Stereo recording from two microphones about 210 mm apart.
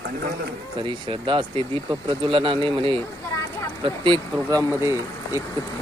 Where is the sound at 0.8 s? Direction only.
25° right (ahead or behind).